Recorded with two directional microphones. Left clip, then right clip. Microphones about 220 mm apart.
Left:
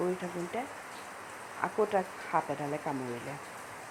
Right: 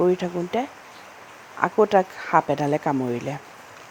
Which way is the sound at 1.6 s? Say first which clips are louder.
Right 12 dB; 45° right (ahead or behind).